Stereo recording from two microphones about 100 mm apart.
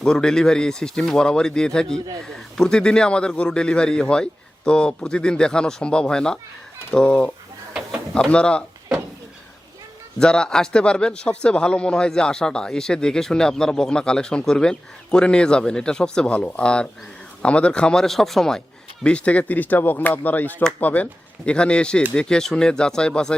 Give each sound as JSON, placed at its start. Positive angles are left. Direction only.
{"t": 0.0, "sound": "speech", "side_deg": 10}
{"t": 10.2, "sound": "speech", "side_deg": 10}